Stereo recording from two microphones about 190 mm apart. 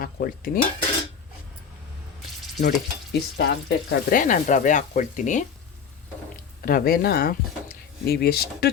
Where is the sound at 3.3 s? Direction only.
60° left (ahead or behind); by 5.4 s 40° left (ahead or behind).